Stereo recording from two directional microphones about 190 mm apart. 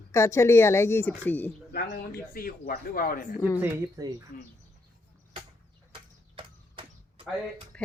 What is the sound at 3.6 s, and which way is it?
Speech, 15° right (ahead or behind).